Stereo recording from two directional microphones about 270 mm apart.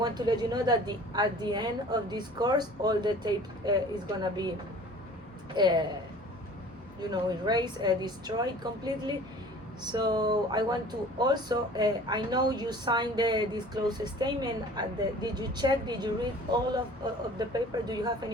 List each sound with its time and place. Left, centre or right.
0.0 s a woman's voice: centre
5.5 s a woman's voice: centre
7.1 s a woman's voice: centre